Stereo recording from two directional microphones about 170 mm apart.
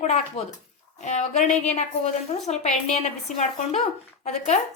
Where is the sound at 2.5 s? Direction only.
40° left (ahead or behind).